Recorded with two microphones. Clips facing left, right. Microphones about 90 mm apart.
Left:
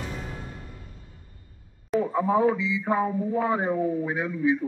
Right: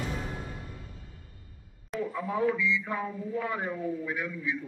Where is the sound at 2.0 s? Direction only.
35° left (ahead or behind).